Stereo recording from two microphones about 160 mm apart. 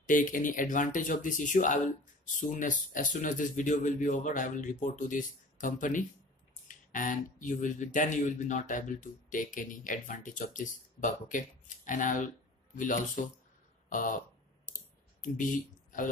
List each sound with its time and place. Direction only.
0.0 s speech: 55° left (ahead or behind)
15.2 s speech: 55° left (ahead or behind)